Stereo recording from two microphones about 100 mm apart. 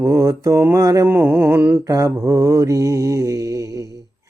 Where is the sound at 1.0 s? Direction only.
20° right (ahead or behind).